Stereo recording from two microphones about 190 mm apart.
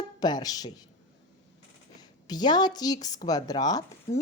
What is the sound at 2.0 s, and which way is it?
A woman's voice, 20° left (ahead or behind).